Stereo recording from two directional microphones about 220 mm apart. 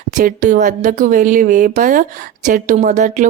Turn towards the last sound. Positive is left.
turn(degrees=-35)  # may be behind; listen again after turning